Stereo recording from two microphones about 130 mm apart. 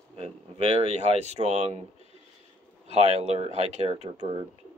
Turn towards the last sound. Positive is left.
turn(degrees=-55)  # may be behind; listen again after turning